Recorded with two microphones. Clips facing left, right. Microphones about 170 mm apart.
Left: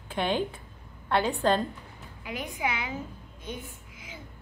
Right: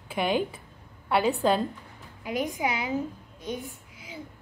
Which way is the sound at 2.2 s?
40° right (ahead or behind).